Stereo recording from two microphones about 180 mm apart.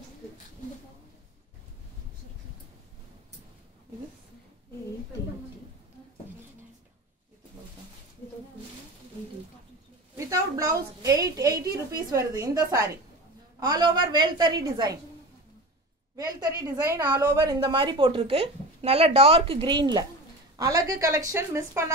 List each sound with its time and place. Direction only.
10.1 s a sound: 20° right (ahead or behind)
12.1 s a woman's voice: 20° right (ahead or behind)
16.2 s a woman's voice: 20° right (ahead or behind)